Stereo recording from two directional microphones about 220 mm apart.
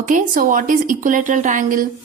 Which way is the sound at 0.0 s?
35° right (ahead or behind).